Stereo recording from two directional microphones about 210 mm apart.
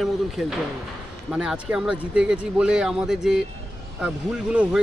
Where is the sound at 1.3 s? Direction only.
5° right (ahead or behind).